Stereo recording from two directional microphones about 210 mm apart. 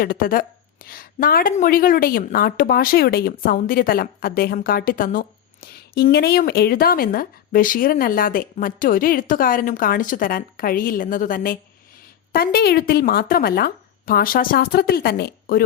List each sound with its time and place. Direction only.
0.0 s a woman's voice: 40° left (ahead or behind)